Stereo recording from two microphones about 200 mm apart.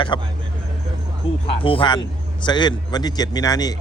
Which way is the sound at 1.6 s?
25° left (ahead or behind).